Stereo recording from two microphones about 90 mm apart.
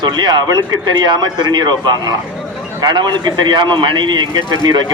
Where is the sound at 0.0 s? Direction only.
55° right (ahead or behind).